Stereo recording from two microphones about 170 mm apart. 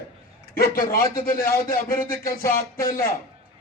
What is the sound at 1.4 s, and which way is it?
Speech, 20° left (ahead or behind).